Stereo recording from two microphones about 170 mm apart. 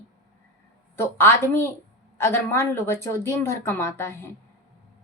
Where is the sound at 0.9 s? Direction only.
15° left (ahead or behind).